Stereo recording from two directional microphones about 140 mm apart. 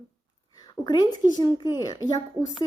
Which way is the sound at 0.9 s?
30° left (ahead or behind).